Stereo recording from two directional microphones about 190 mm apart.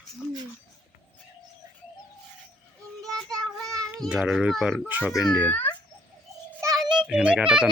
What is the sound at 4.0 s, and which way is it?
A child's voice, 5° right (ahead or behind).